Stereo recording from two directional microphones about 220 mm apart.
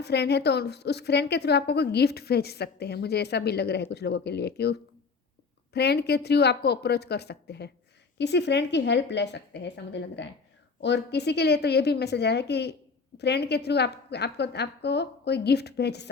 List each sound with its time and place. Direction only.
0.0 s a woman's voice: 50° left (ahead or behind)